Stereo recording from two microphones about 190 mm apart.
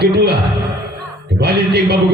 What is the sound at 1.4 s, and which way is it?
Speech, 60° right (ahead or behind).